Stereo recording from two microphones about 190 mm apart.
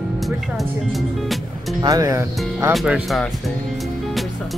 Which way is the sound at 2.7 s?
Centre (ahead or behind).